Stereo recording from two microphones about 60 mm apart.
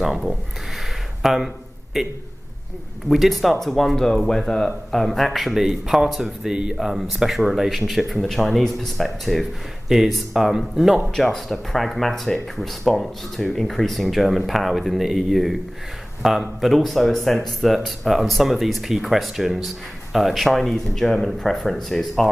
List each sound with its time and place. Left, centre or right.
0.0 s a man's voice: centre
6.5 s a man's voice: centre